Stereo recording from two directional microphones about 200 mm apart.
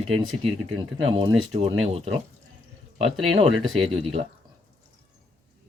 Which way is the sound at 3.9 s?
30° right (ahead or behind).